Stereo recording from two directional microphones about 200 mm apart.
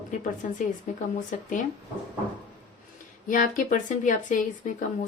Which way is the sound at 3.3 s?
40° left (ahead or behind).